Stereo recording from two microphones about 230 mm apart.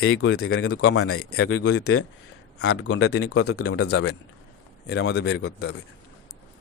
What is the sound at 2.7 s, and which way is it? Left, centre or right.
Speech, left.